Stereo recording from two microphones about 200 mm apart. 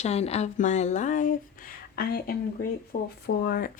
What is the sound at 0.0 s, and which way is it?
Speech, 30° left (ahead or behind).